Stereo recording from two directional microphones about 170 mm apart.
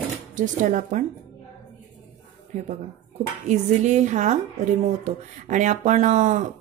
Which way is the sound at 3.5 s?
45° right (ahead or behind).